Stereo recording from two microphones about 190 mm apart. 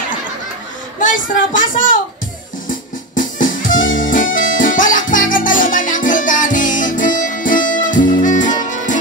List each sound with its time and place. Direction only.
0.9 s speech: 45° left (ahead or behind)
2.7 s music: 45° left (ahead or behind)